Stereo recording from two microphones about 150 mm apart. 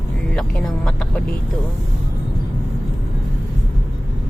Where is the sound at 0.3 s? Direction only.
5° left (ahead or behind).